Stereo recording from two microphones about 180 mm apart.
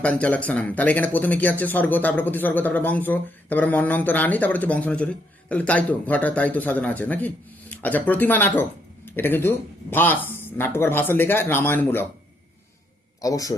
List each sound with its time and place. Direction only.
0.0 s speech: 5° left (ahead or behind)
13.2 s speech: 20° left (ahead or behind)